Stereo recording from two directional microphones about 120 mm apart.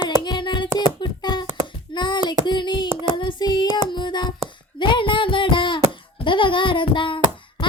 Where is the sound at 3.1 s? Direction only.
40° left (ahead or behind).